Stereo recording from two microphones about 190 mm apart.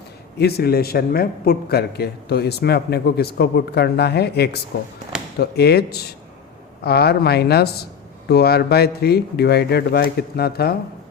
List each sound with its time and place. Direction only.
0.3 s a man's voice: 55° left (ahead or behind)